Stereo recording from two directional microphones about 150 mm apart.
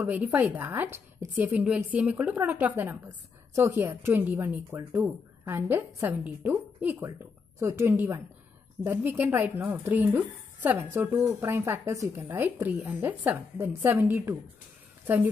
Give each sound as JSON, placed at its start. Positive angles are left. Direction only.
{"t": 0.0, "sound": "a woman's voice", "side_deg": -10}